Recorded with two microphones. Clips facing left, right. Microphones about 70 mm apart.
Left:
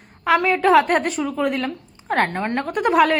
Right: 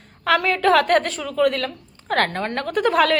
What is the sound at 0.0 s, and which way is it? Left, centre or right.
A woman's voice, centre.